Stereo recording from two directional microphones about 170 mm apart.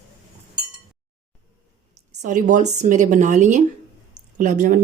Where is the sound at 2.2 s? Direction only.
45° right (ahead or behind).